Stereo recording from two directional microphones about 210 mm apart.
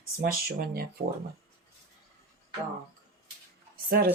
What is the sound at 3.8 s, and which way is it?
Speech, 45° right (ahead or behind).